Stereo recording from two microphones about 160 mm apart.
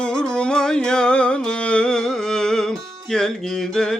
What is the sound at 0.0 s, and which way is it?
Music, 5° left (ahead or behind).